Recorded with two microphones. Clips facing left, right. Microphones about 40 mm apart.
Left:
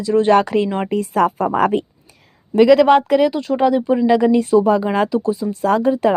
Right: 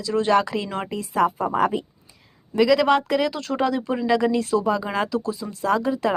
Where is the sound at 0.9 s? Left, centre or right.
Left.